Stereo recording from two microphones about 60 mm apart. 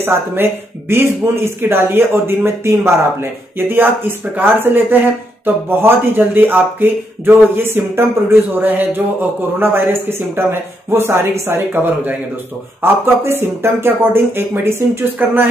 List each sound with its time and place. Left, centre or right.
0.0 s speech: right
11.7 s a man's voice: right
12.8 s speech: right